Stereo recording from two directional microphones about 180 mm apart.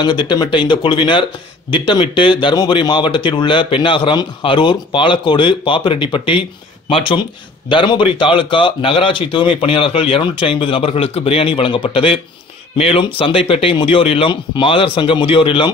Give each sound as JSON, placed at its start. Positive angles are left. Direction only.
{"t": 0.0, "sound": "speech", "side_deg": 25}